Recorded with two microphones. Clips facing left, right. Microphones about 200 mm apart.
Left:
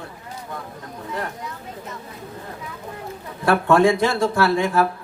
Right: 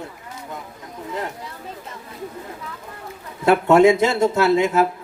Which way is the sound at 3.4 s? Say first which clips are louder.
Right 3 dB; 20° right (ahead or behind).